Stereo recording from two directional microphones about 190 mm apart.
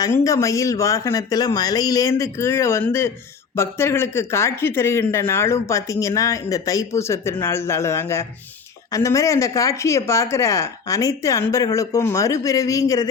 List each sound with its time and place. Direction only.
0.0 s speech: 15° left (ahead or behind)